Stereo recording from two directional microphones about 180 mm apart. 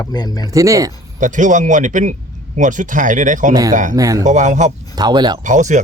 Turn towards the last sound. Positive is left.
turn(degrees=-45)  # may be behind; listen again after turning